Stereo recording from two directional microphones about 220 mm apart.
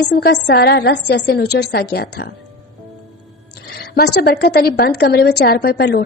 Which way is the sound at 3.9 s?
45° left (ahead or behind).